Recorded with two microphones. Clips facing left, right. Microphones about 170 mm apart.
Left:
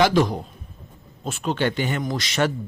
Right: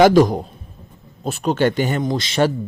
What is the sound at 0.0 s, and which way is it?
Speech, 45° right (ahead or behind).